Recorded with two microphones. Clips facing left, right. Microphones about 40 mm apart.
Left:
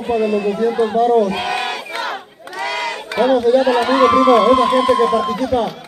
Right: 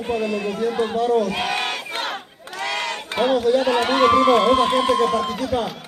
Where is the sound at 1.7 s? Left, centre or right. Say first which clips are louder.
Left 3 dB; centre.